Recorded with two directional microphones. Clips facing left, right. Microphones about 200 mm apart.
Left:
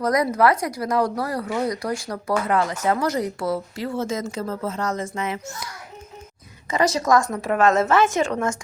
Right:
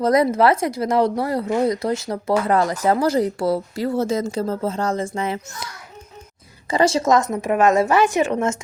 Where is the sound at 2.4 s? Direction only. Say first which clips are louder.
Right 3 dB; 35° right (ahead or behind).